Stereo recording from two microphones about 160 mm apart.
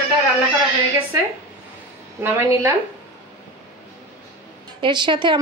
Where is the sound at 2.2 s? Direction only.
15° right (ahead or behind).